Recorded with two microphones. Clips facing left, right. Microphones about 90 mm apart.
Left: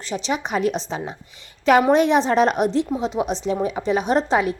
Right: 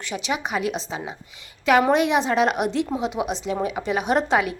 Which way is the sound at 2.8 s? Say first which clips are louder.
Left 2 dB; 15° right (ahead or behind).